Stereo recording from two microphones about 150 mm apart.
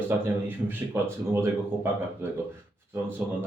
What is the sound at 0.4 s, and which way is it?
Speech, 15° right (ahead or behind).